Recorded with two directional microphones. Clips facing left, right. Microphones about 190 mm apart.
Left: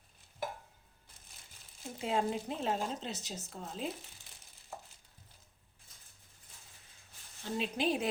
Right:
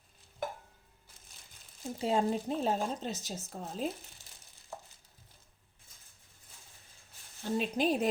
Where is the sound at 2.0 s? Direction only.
35° right (ahead or behind).